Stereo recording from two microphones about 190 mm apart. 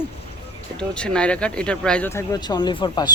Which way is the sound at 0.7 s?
5° left (ahead or behind).